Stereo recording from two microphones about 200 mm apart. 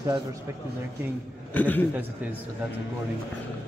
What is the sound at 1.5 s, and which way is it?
Speech, 10° left (ahead or behind).